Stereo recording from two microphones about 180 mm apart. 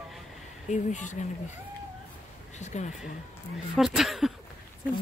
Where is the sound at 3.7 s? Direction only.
Centre (ahead or behind).